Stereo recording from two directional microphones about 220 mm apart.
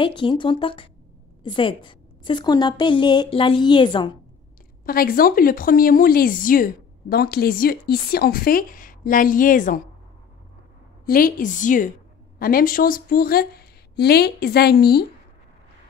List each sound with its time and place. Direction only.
0.0 s a woman's voice: 20° left (ahead or behind)
4.8 s speech: 40° left (ahead or behind)
11.1 s speech: 40° left (ahead or behind)